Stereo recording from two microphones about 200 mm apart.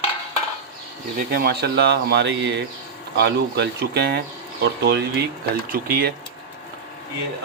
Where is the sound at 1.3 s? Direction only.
50° right (ahead or behind).